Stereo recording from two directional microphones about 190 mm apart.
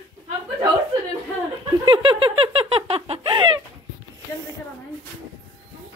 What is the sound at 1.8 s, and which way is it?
Speech, 25° right (ahead or behind).